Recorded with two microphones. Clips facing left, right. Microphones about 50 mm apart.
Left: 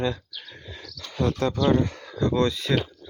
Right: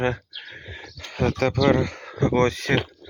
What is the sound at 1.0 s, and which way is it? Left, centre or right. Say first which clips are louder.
Speech: right 2 dB; right.